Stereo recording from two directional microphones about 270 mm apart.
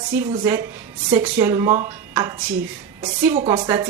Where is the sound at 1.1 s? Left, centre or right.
Centre.